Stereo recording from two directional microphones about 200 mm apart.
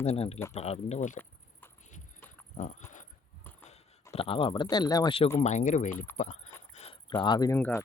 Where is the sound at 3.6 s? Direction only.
30° left (ahead or behind).